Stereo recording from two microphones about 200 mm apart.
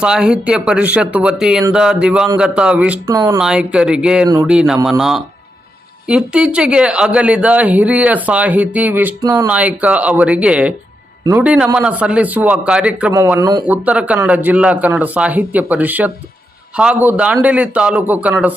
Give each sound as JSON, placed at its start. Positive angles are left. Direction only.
{"t": 0.0, "sound": "speech", "side_deg": -5}
{"t": 3.1, "sound": "speech", "side_deg": -15}
{"t": 3.3, "sound": "speech", "side_deg": -5}
{"t": 9.5, "sound": "speech", "side_deg": -5}
{"t": 13.7, "sound": "speech", "side_deg": -5}